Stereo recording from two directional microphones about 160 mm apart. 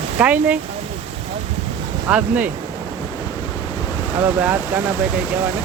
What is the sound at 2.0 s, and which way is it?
Speech, 10° right (ahead or behind).